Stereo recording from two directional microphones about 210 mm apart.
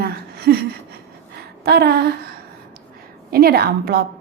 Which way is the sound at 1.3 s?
50° right (ahead or behind).